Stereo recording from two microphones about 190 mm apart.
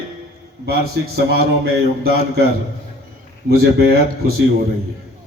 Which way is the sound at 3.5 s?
55° right (ahead or behind).